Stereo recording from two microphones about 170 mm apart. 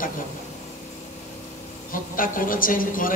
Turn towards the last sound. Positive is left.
turn(degrees=55)  # may be behind; listen again after turning